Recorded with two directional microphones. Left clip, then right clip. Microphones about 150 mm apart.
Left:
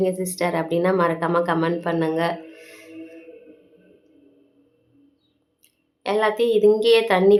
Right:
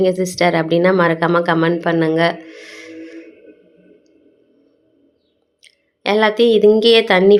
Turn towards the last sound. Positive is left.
turn(degrees=-25)  # may be behind; listen again after turning